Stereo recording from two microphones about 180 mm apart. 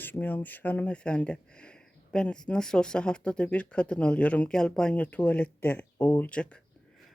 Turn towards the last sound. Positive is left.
turn(degrees=10)  # may be behind; listen again after turning